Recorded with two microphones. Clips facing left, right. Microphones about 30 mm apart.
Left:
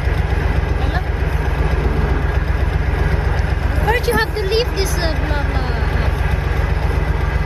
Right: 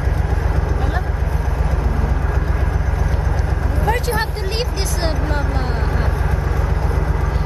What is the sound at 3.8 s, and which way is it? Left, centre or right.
Vehicle, left.